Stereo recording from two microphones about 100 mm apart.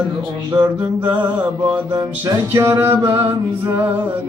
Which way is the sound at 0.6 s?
15° right (ahead or behind).